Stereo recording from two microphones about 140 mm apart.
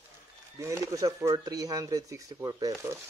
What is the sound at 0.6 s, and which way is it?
Speech, 20° right (ahead or behind).